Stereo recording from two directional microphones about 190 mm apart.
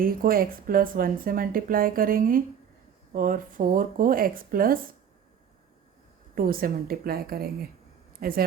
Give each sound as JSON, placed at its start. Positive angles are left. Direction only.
{"t": 0.0, "sound": "speech", "side_deg": -50}
{"t": 6.3, "sound": "speech", "side_deg": -50}